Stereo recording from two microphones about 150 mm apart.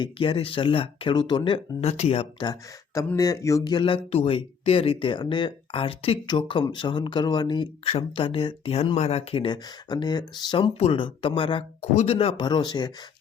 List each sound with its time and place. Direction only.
0.0 s speech: 35° left (ahead or behind)
2.5 s speech: 20° left (ahead or behind)